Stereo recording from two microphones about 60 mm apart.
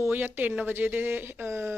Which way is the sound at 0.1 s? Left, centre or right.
Right.